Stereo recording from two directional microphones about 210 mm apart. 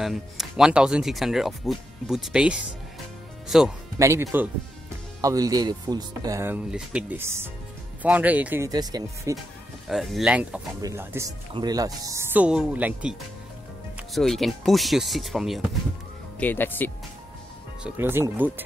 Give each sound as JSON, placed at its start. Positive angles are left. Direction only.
{"t": 0.0, "sound": "speech", "side_deg": 0}
{"t": 4.0, "sound": "speech", "side_deg": -15}
{"t": 9.8, "sound": "speech", "side_deg": 0}
{"t": 14.1, "sound": "speech", "side_deg": 0}
{"t": 17.8, "sound": "speech", "side_deg": -10}